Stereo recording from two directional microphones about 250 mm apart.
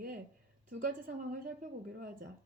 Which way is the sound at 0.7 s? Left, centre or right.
Right.